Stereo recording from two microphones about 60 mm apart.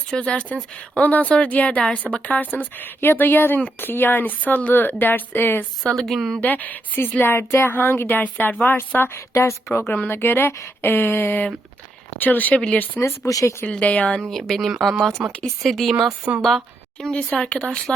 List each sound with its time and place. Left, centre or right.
0.1 s speech: centre; by 5.6 s left
6.0 s speech: centre
6.4 s speech: left
7.2 s speech: left
9.3 s speech: left
9.7 s speech: left
12.5 s speech: centre
13.0 s speech: left
13.7 s speech: left
14.2 s speech: centre
15.2 s speech: centre
15.6 s speech: centre
17.0 s speech: centre